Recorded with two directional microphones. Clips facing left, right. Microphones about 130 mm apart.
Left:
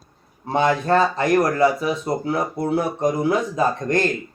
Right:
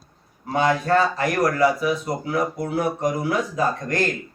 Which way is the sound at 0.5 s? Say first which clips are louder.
Left 1 dB; 25° left (ahead or behind).